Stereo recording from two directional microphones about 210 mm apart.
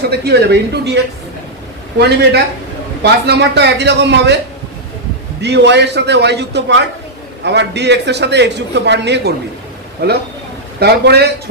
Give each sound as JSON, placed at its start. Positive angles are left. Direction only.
{"t": 0.1, "sound": "a man's voice", "side_deg": -50}
{"t": 5.4, "sound": "a man's voice", "side_deg": -55}